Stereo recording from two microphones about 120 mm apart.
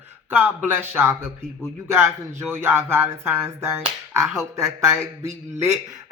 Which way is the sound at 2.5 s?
20° right (ahead or behind).